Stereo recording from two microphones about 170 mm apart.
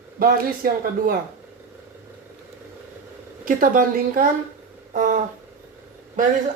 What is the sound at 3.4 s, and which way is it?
Speech, 55° right (ahead or behind).